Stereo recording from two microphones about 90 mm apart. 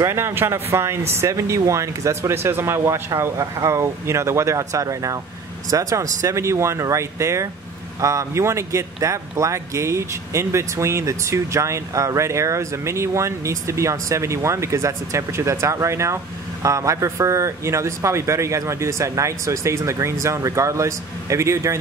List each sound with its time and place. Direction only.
0.0 s speech: 30° right (ahead or behind)